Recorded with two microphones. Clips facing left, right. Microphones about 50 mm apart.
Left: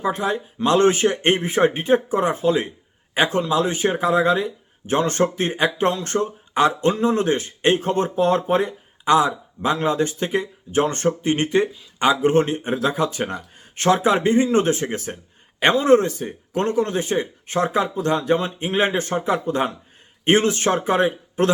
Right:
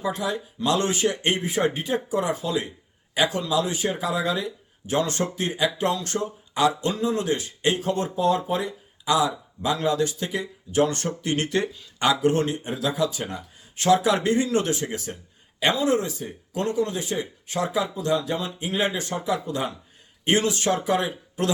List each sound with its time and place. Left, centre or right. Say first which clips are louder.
0.0 s speech: left 4 dB; left